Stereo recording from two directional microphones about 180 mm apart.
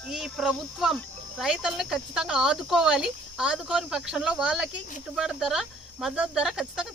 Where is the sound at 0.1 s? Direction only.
Centre (ahead or behind).